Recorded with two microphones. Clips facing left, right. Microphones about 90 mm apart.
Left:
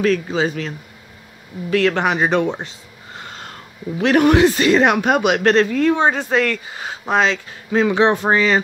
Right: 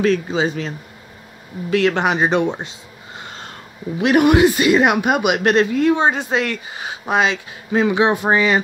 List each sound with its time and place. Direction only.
0.0 s speech: 20° right (ahead or behind)
2.6 s a sound: 20° right (ahead or behind)
4.0 s speech: 15° right (ahead or behind)